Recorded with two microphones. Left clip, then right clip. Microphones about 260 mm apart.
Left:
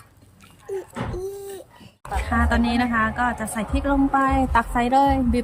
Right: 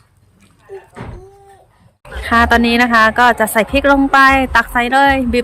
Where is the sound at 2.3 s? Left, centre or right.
Right.